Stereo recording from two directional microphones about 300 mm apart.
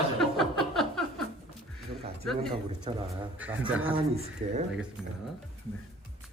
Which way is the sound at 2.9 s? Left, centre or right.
Centre.